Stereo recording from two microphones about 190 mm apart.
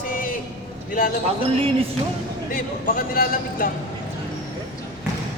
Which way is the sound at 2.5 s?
45° left (ahead or behind).